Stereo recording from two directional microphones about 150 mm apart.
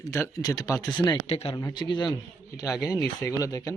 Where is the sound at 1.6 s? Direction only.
25° left (ahead or behind).